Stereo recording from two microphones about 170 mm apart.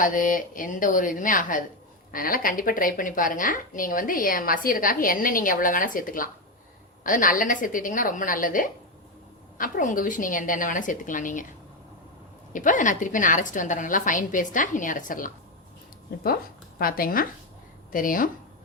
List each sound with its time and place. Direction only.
0.0 s a woman's voice: 50° left (ahead or behind)
12.5 s a woman's voice: 50° left (ahead or behind)